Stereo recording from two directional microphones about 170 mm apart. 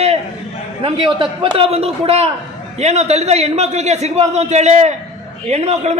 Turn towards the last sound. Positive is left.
turn(degrees=-40)  # may be behind; listen again after turning